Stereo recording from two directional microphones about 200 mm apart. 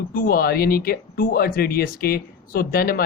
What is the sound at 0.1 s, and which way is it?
Speech, 45° left (ahead or behind).